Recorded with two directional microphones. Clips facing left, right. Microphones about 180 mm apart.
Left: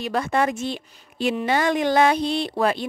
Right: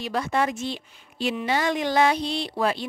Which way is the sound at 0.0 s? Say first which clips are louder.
Left 3 dB; 50° left (ahead or behind).